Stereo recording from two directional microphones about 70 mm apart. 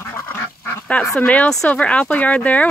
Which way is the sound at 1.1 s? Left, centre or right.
Centre.